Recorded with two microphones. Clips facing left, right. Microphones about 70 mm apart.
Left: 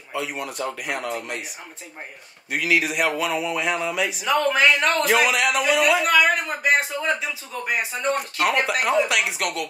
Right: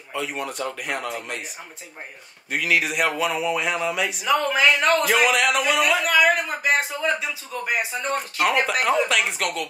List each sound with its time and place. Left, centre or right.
0.1 s speech: centre
2.5 s speech: centre